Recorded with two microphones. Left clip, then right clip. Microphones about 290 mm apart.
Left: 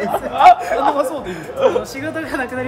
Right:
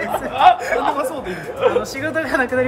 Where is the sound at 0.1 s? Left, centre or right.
Left.